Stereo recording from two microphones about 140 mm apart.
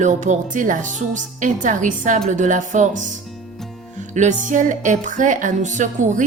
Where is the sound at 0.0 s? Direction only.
60° right (ahead or behind).